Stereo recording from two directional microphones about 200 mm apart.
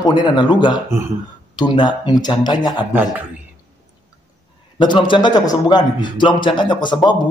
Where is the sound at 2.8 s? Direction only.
10° right (ahead or behind).